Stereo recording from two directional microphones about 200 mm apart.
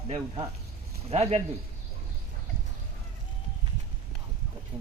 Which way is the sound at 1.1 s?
30° right (ahead or behind).